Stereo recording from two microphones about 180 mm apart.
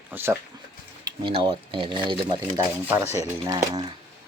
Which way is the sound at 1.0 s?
25° right (ahead or behind).